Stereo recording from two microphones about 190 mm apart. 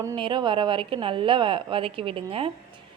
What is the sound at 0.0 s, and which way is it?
A woman's voice, 20° right (ahead or behind).